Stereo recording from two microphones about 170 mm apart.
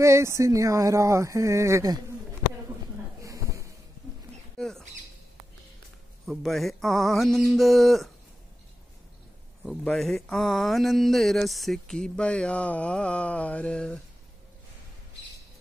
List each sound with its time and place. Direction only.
0.0 s speech: 15° right (ahead or behind)
3.2 s a sound: 20° right (ahead or behind)
4.6 s rodents: 5° left (ahead or behind)
6.2 s speech: centre (ahead or behind)
9.6 s speech: centre (ahead or behind)